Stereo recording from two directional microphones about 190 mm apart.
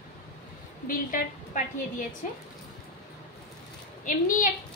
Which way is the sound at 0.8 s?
45° left (ahead or behind).